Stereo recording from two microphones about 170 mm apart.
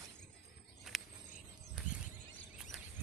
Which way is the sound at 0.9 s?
Centre (ahead or behind).